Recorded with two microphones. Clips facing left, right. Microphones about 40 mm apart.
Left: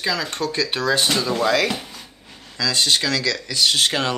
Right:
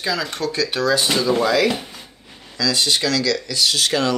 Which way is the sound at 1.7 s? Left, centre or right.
Centre.